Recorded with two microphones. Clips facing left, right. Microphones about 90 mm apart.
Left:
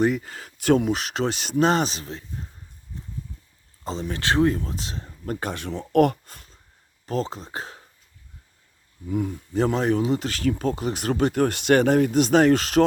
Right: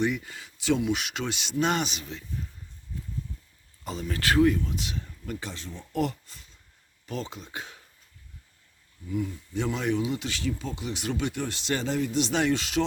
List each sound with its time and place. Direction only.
0.0 s speech: 40° left (ahead or behind)
3.8 s speech: 30° left (ahead or behind); by 6.6 s 50° left (ahead or behind)
7.0 s speech: 35° left (ahead or behind)
9.0 s speech: 50° left (ahead or behind)